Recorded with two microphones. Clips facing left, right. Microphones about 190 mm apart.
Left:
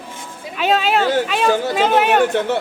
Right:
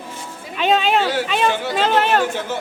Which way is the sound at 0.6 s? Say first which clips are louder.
Even; 5° left (ahead or behind).